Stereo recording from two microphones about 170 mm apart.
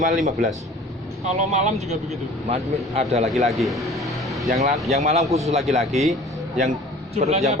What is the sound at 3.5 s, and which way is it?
Speech, centre (ahead or behind).